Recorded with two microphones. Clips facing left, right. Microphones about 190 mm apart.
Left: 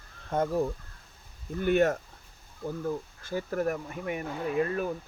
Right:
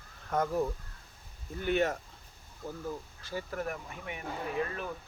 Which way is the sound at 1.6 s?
50° left (ahead or behind).